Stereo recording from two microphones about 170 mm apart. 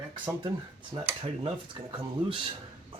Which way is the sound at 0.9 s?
35° right (ahead or behind).